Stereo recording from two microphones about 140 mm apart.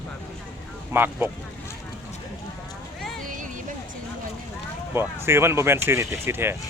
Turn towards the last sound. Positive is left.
turn(degrees=-15)  # may be behind; listen again after turning